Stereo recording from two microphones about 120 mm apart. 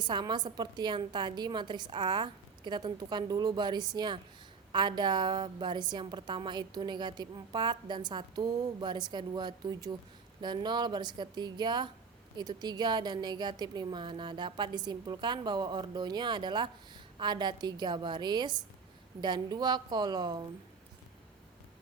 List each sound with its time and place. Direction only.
0.0 s a woman's voice: 40° right (ahead or behind)